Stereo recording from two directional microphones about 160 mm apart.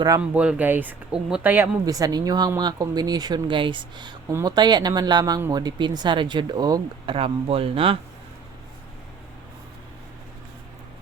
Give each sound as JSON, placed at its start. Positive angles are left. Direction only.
{"t": 0.2, "sound": "speech", "side_deg": -10}
{"t": 1.8, "sound": "speech", "side_deg": -20}